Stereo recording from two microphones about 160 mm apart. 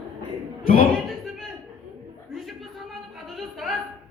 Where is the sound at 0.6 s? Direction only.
60° left (ahead or behind).